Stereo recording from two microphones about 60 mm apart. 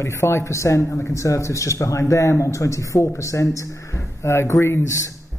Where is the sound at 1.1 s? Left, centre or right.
Left.